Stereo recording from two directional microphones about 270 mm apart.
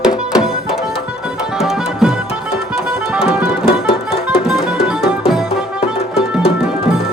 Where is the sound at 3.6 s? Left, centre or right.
Centre.